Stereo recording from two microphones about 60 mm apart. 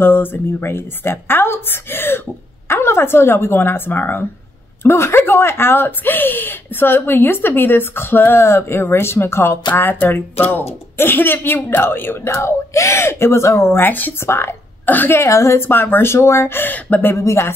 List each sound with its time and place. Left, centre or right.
0.0 s speech: left
12.3 s speech: left
13.7 s speech: left
14.2 s speech: left
14.9 s speech: left
15.1 s speech: left
16.5 s speech: left
17.1 s speech: left